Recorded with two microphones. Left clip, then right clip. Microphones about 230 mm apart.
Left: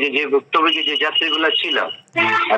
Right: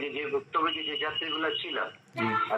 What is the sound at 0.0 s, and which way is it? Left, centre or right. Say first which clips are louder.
Speech: left 14 dB; left.